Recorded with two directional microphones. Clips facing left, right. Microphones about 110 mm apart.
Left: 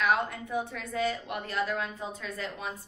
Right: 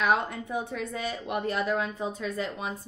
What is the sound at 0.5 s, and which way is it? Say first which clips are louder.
A woman's voice: even; 20° right (ahead or behind).